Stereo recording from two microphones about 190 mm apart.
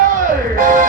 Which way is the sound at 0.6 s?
40° right (ahead or behind).